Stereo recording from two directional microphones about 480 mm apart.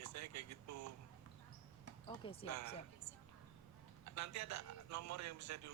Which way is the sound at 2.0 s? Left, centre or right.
Centre.